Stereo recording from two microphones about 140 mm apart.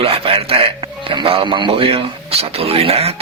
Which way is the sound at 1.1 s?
40° right (ahead or behind).